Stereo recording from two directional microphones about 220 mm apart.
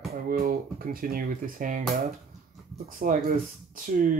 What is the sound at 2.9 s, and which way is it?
Speech, 40° right (ahead or behind).